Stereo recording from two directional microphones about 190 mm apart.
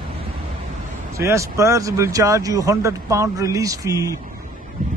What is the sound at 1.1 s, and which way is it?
Speech, 15° right (ahead or behind).